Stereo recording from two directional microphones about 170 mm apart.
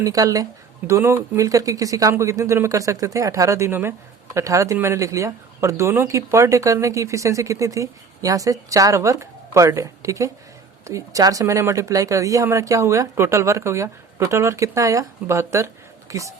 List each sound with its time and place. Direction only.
0.0 s speech: 20° right (ahead or behind)